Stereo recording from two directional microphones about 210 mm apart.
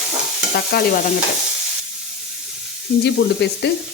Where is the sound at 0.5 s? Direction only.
45° left (ahead or behind).